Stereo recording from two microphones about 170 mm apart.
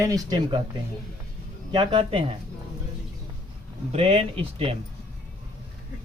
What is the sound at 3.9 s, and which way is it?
Speech, 40° right (ahead or behind).